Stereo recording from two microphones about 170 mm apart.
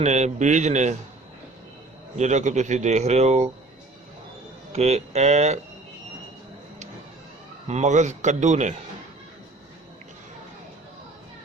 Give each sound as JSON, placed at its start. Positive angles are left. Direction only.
{"t": 0.0, "sound": "a man's voice", "side_deg": -40}
{"t": 2.1, "sound": "a man's voice", "side_deg": -45}
{"t": 4.7, "sound": "speech", "side_deg": -40}
{"t": 7.7, "sound": "a man's voice", "side_deg": -45}